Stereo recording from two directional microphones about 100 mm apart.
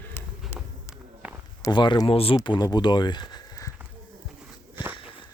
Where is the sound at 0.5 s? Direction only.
25° left (ahead or behind).